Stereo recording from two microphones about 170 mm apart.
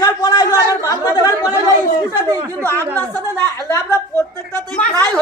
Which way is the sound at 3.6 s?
15° left (ahead or behind).